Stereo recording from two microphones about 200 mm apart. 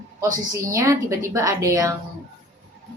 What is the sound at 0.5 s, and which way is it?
A woman's voice, 15° right (ahead or behind).